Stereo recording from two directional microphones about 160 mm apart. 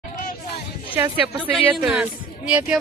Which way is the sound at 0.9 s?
10° right (ahead or behind).